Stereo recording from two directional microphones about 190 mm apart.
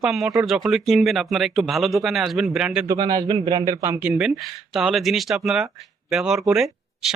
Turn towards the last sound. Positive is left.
turn(degrees=0)  # may be behind; listen again after turning